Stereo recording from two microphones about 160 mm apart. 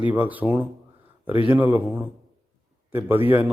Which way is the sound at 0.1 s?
10° right (ahead or behind).